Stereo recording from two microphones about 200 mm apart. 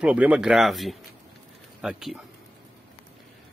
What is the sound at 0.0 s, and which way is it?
Speech, 5° right (ahead or behind).